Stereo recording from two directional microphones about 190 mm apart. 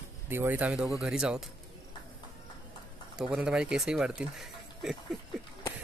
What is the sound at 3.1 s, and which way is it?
Speech, 5° right (ahead or behind).